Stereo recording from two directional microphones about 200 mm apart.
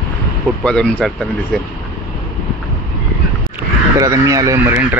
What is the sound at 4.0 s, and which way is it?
Speech, 15° right (ahead or behind).